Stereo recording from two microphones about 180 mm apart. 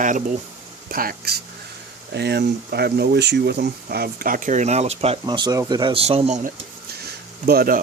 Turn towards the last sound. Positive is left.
turn(degrees=-55)  # may be behind; listen again after turning